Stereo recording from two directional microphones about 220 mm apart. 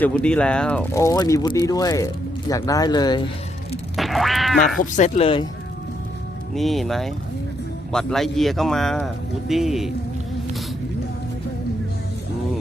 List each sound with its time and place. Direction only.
0.0 s speech: 5° left (ahead or behind)
3.9 s quack: centre (ahead or behind)
4.9 s speech: 30° left (ahead or behind)
6.5 s speech: centre (ahead or behind)